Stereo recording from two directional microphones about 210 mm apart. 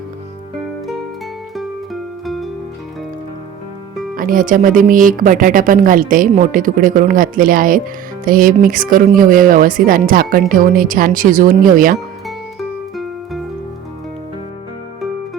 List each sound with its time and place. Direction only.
1.5 s music: centre (ahead or behind)
4.1 s speech: 40° right (ahead or behind)
12.5 s music: centre (ahead or behind)